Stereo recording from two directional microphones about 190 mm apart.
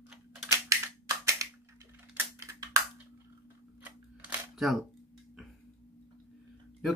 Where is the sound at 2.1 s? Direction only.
15° right (ahead or behind).